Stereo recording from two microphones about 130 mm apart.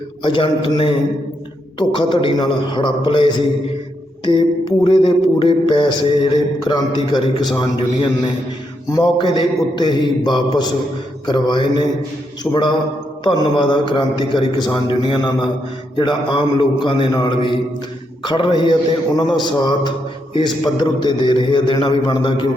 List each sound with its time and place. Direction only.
0.2 s a man's voice: 40° left (ahead or behind)
8.9 s a man's voice: 30° left (ahead or behind)
12.4 s a man's voice: 15° left (ahead or behind)
13.2 s a man's voice: 35° left (ahead or behind)